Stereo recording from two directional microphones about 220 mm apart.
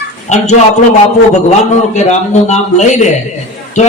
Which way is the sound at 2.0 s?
30° left (ahead or behind).